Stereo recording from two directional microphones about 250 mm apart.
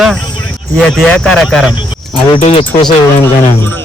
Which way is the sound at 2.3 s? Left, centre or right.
Left.